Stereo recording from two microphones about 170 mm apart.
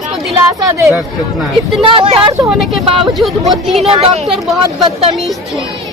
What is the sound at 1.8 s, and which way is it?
Speech, 30° right (ahead or behind).